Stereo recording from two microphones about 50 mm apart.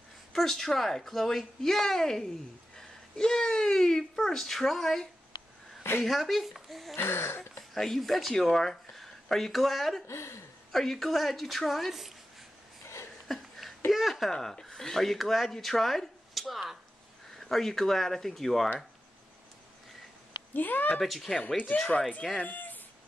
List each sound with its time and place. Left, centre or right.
0.3 s speech: centre
6.0 s speech: centre
7.0 s a sound: left
7.7 s speech: centre
10.0 s speech: left
10.7 s speech: centre
12.8 s a sound: left
13.3 s a sound: centre
13.9 s speech: centre
14.3 s speech: centre
20.5 s speech: left
21.0 s speech: centre
21.7 s speech: centre
22.4 s speech: left